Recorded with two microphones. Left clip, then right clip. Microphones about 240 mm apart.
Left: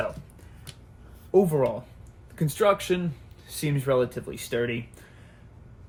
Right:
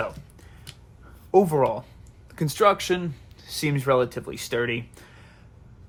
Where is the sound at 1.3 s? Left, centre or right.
Right.